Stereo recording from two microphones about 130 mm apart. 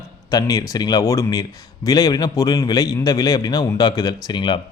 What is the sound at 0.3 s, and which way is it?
A man's voice, 30° left (ahead or behind).